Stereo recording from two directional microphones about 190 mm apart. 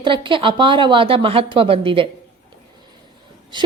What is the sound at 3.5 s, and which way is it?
Speech, 25° right (ahead or behind).